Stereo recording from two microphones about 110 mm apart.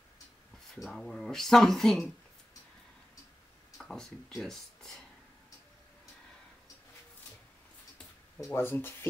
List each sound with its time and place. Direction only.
0.8 s speech: 5° left (ahead or behind)
3.7 s a sound: 5° left (ahead or behind)
4.4 s speech: 5° left (ahead or behind)
8.4 s speech: 20° left (ahead or behind)